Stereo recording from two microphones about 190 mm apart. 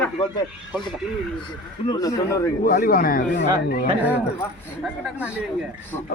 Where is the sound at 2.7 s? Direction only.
50° left (ahead or behind).